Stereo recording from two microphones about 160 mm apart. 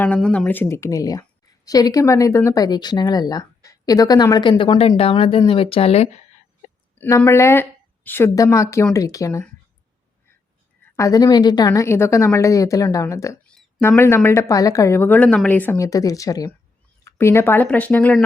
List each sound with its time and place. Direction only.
0.0 s a woman's voice: 5° left (ahead or behind); by 6.1 s 40° left (ahead or behind)
7.0 s a woman's voice: 15° left (ahead or behind)
10.9 s speech: 20° left (ahead or behind)
13.5 s a sound: centre (ahead or behind)
13.8 s a woman's voice: 15° left (ahead or behind)